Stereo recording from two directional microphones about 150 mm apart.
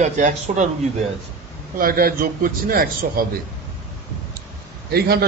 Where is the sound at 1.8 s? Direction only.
75° right (ahead or behind).